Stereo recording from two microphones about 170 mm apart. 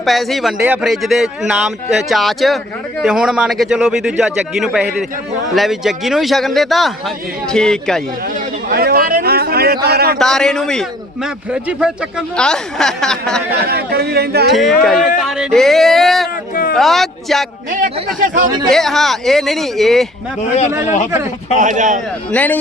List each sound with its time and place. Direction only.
0.0 s speech: centre (ahead or behind)
8.7 s speech: 65° right (ahead or behind)
10.2 s speech: 5° left (ahead or behind)
13.7 s speech: 70° right (ahead or behind)
14.5 s speech: centre (ahead or behind)
17.7 s speech: 50° right (ahead or behind)
18.7 s speech: centre (ahead or behind)
20.8 s speech: 45° left (ahead or behind)
21.6 s speech: 45° right (ahead or behind)
22.3 s speech: 10° left (ahead or behind)